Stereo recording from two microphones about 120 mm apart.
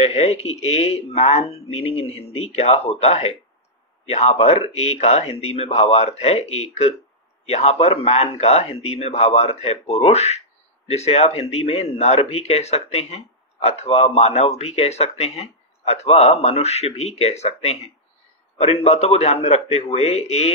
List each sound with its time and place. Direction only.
0.0 s a man's voice: 65° left (ahead or behind)